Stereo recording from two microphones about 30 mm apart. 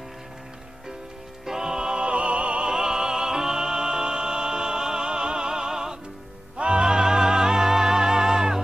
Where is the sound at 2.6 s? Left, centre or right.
Right.